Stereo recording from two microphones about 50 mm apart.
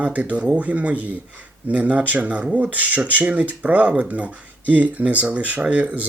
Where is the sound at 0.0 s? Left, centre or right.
Right.